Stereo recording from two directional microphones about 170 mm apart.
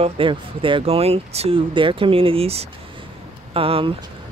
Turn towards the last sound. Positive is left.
turn(degrees=-35)  # may be behind; listen again after turning